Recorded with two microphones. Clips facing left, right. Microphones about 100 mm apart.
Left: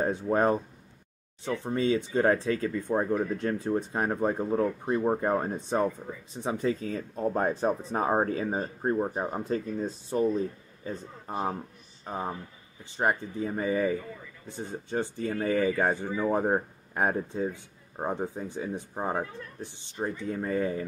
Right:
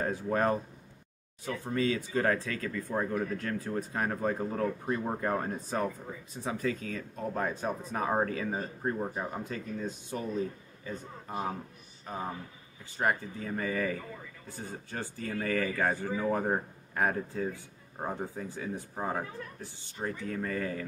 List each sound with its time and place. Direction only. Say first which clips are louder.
0.0 s speech: left 4 dB; 25° left (ahead or behind)